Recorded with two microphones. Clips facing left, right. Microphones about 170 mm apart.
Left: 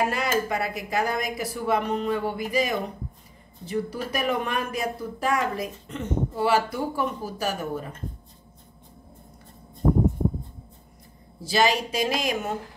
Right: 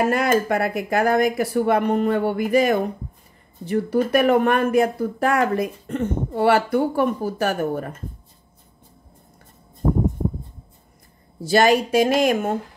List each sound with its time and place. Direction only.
0.1 s speech: 55° right (ahead or behind)
11.5 s speech: 55° right (ahead or behind)